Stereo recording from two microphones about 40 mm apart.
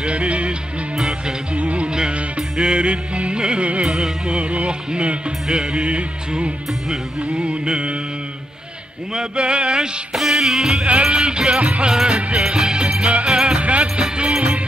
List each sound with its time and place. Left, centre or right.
0.0 s music: right
0.9 s music: centre
1.5 s music: right
1.9 s music: centre
9.4 s music: right
10.1 s music: centre
10.9 s music: right
12.1 s music: right
12.4 s music: centre